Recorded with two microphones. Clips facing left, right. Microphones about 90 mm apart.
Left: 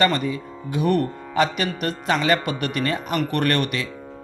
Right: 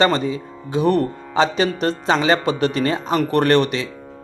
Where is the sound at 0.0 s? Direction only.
25° right (ahead or behind).